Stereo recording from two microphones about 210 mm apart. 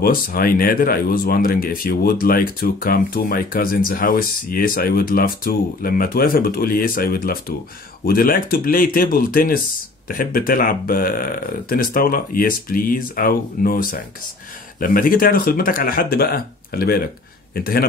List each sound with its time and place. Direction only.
0.0 s speech: 45° left (ahead or behind)